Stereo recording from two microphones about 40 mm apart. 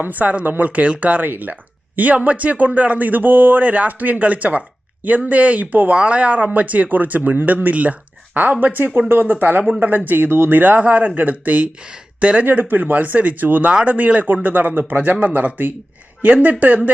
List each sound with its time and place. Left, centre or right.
0.0 s speech: right
5.9 s speech: right
10.2 s speech: right
10.6 s speech: right
11.8 s speech: right
12.5 s speech: right